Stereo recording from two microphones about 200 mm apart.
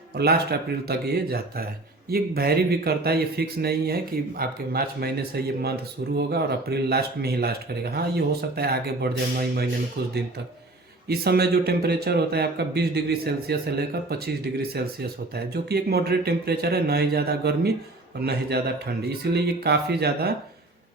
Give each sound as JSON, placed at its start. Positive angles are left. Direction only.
{"t": 0.2, "sound": "speech", "side_deg": -50}
{"t": 11.1, "sound": "speech", "side_deg": -50}